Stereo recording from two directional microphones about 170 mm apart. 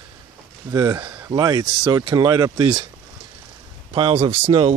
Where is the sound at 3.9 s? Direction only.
35° right (ahead or behind).